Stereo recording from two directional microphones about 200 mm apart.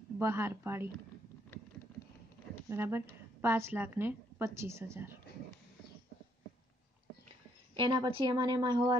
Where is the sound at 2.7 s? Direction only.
10° right (ahead or behind).